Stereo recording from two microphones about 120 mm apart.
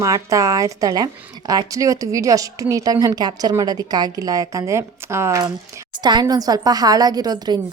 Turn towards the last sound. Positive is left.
turn(degrees=-35)  # may be behind; listen again after turning